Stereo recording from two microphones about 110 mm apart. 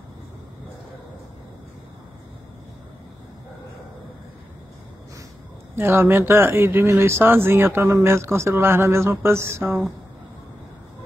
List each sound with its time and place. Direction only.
5.8 s speech: 20° right (ahead or behind)